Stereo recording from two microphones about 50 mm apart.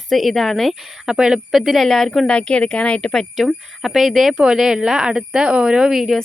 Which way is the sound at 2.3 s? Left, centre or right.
Centre.